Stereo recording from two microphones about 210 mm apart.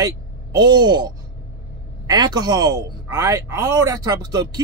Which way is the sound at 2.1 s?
20° right (ahead or behind).